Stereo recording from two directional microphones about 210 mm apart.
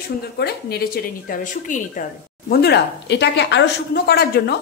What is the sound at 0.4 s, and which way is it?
Speech, 50° left (ahead or behind).